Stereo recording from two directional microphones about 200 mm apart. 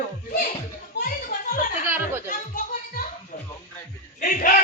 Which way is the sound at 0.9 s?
45° left (ahead or behind).